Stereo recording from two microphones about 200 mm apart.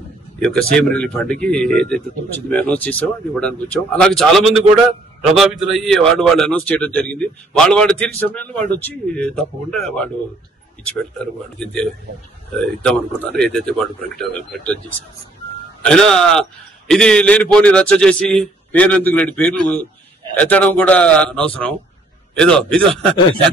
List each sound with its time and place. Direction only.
0.4 s a man's voice: 5° left (ahead or behind)
11.6 s a man's voice: 5° left (ahead or behind)